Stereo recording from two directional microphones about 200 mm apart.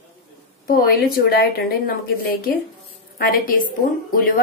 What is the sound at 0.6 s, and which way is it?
A woman's voice, 45° left (ahead or behind).